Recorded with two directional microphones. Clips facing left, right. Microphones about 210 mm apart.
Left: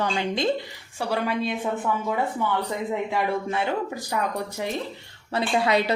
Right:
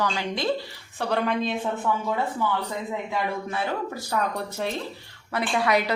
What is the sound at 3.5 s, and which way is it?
Speech, 20° left (ahead or behind).